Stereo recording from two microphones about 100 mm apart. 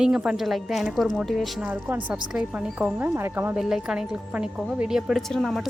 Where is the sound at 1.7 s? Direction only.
20° right (ahead or behind).